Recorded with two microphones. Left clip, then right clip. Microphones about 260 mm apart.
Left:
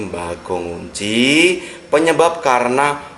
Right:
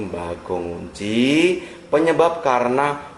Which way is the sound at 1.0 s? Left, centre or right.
Centre.